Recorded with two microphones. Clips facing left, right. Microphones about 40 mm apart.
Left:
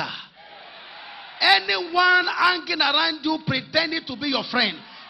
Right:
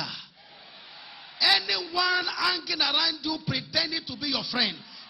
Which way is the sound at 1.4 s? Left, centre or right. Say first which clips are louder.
Left 6 dB; left.